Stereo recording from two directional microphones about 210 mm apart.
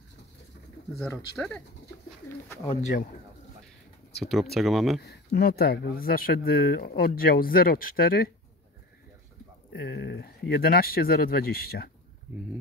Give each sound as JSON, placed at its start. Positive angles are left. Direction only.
{"t": 0.9, "sound": "speech", "side_deg": 10}
{"t": 2.7, "sound": "speech", "side_deg": 35}
{"t": 4.2, "sound": "speech", "side_deg": 0}
{"t": 5.0, "sound": "speech", "side_deg": 50}
{"t": 9.7, "sound": "speech", "side_deg": 50}